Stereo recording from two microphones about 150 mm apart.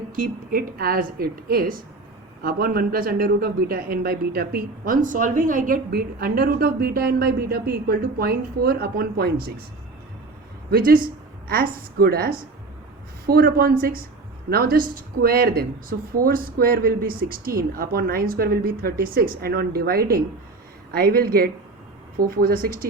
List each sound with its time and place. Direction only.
0.2 s a woman's voice: 80° right
2.4 s a man's voice: 90° right
10.7 s a man's voice: 80° right